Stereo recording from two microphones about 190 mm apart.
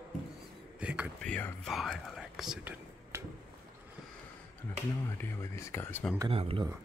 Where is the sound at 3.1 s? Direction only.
15° right (ahead or behind).